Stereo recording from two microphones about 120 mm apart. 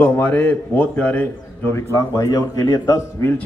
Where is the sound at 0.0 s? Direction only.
15° left (ahead or behind).